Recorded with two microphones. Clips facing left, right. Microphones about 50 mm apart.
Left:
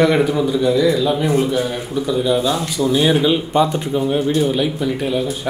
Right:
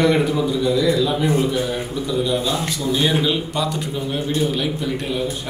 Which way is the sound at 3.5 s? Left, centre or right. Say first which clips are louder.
Left 7 dB; left.